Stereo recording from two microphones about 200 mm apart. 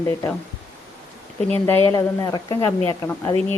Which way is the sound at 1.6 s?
15° left (ahead or behind).